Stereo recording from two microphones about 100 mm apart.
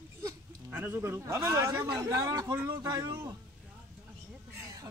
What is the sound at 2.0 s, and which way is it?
Speech, 35° right (ahead or behind).